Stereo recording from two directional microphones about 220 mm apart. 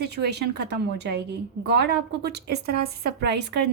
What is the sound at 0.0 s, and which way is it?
A woman's voice, 50° right (ahead or behind).